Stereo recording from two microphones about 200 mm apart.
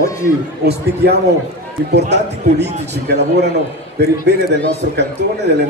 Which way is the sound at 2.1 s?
60° right (ahead or behind).